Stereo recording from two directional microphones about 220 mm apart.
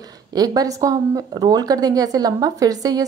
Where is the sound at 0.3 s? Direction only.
15° right (ahead or behind).